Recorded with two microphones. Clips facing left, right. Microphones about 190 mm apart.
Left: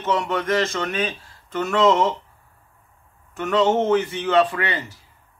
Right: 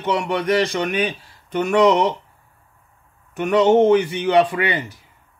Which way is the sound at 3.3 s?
15° right (ahead or behind).